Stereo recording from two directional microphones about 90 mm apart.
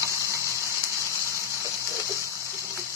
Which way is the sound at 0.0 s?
35° right (ahead or behind).